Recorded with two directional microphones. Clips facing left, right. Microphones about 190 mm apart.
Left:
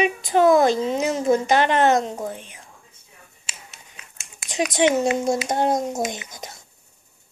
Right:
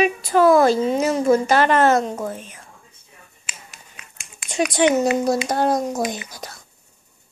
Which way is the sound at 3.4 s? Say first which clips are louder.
Right 1 dB; 25° left (ahead or behind).